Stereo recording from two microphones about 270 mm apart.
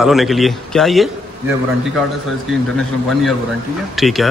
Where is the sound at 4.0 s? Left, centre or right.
Centre.